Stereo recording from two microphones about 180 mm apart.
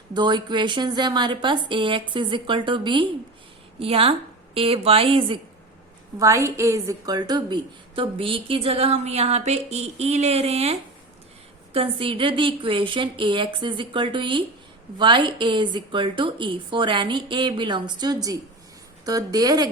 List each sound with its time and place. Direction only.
0.1 s a woman's voice: 25° right (ahead or behind)
6.1 s a woman's voice: 15° right (ahead or behind)